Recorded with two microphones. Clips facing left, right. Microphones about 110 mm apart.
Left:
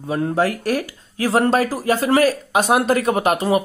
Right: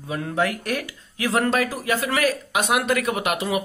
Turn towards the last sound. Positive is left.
turn(degrees=40)  # may be behind; listen again after turning